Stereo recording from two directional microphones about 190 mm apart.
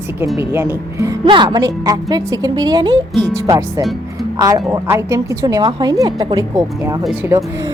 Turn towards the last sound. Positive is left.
turn(degrees=-10)  # may be behind; listen again after turning